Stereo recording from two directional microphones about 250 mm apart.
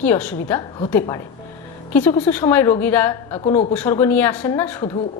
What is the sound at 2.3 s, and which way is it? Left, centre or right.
A woman's voice, centre.